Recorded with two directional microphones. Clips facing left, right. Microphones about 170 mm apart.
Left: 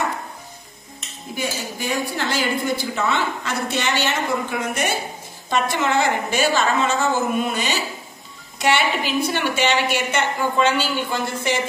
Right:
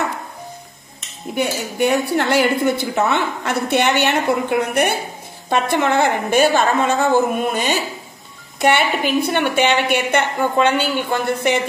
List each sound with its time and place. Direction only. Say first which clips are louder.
1.3 s a woman's voice: right 5 dB; 60° right (ahead or behind)